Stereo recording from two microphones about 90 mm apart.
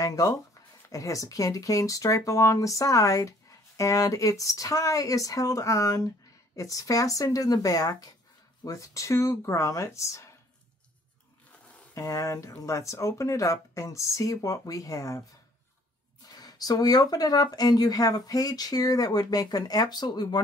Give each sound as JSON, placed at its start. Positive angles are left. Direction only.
{"t": 0.0, "sound": "speech", "side_deg": 40}
{"t": 11.9, "sound": "speech", "side_deg": 40}
{"t": 16.3, "sound": "speech", "side_deg": 45}